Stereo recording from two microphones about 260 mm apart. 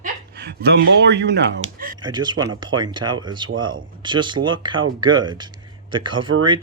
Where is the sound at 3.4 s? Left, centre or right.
Right.